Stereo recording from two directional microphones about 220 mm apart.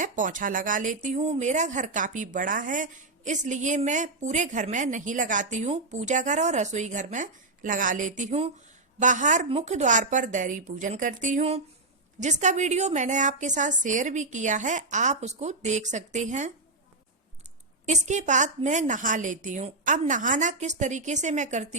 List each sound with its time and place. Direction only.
0.0 s speech: 35° right (ahead or behind)
17.8 s speech: 30° right (ahead or behind)